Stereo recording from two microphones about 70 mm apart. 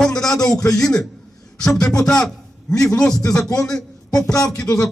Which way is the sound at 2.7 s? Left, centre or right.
Left.